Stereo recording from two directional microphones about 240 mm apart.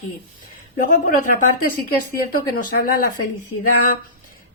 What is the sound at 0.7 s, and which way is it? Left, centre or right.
Speech, left.